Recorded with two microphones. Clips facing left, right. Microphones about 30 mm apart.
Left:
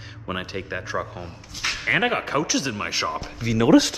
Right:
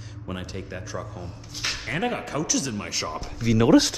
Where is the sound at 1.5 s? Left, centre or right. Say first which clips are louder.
Left 3 dB; centre.